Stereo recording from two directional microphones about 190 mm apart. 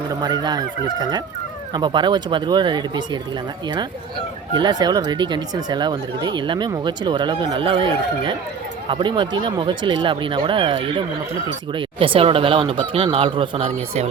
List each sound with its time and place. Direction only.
0.1 s speech: 20° right (ahead or behind)
4.5 s speech: 25° right (ahead or behind)